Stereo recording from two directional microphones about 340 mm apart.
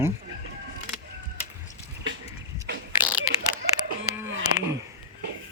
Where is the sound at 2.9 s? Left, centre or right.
Centre.